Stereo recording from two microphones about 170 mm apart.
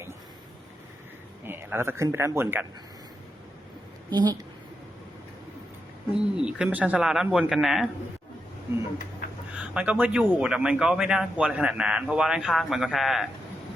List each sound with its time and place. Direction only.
1.5 s speech: 15° right (ahead or behind)
4.1 s a woman's voice: 25° right (ahead or behind)
6.3 s a man's voice: 5° right (ahead or behind)
9.6 s a man's voice: 10° right (ahead or behind)